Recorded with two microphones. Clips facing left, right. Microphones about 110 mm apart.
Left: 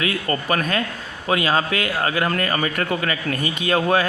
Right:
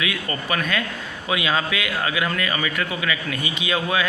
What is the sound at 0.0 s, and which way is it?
Speech, 40° left (ahead or behind).